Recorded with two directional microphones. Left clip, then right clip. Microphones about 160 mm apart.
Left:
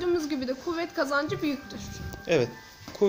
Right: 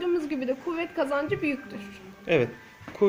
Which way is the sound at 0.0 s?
30° right (ahead or behind).